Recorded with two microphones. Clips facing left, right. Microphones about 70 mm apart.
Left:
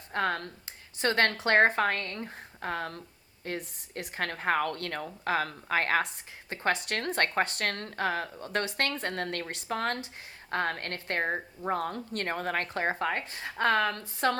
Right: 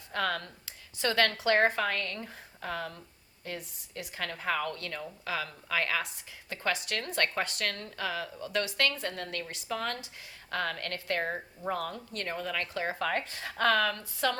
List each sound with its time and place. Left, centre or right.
0.1 s a woman's voice: left
13.1 s speech: left